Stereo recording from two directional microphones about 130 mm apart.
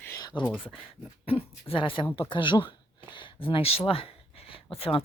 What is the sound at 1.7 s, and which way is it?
Speech, 40° left (ahead or behind).